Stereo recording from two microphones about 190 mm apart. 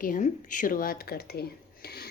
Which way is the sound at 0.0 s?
45° left (ahead or behind).